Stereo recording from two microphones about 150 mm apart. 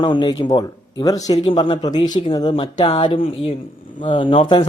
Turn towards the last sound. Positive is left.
turn(degrees=35)  # may be behind; listen again after turning